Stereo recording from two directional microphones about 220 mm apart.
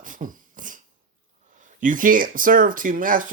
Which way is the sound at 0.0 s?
35° right (ahead or behind).